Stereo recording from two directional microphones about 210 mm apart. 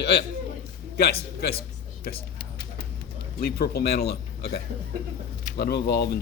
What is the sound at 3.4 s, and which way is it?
Speech, 45° left (ahead or behind).